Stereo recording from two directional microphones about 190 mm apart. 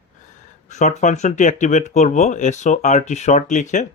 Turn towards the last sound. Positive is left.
turn(degrees=40)  # may be behind; listen again after turning